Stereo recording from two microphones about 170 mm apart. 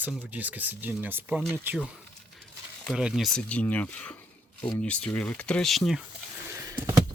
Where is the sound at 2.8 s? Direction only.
5° right (ahead or behind).